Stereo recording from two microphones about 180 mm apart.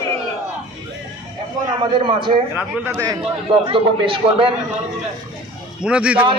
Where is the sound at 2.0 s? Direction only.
30° right (ahead or behind).